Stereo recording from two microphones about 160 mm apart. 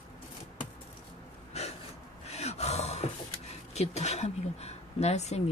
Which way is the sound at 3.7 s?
45° left (ahead or behind).